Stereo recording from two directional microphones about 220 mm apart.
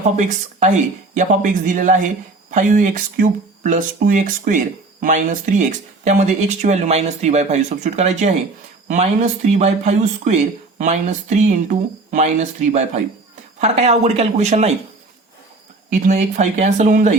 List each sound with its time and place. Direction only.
0.2 s speech: 35° right (ahead or behind)
15.9 s speech: 35° right (ahead or behind)